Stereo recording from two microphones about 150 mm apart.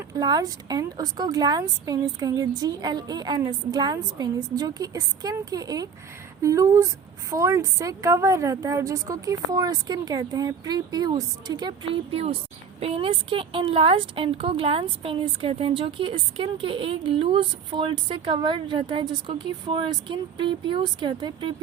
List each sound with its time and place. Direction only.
0.2 s a woman's voice: 25° right (ahead or behind)